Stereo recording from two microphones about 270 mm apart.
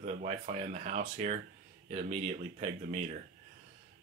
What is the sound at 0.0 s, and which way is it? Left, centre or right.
Speech, right.